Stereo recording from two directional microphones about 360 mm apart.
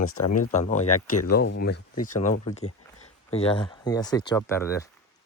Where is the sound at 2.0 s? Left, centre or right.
Left.